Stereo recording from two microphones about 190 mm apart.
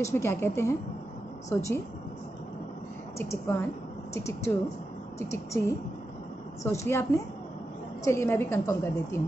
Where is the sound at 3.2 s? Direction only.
10° left (ahead or behind).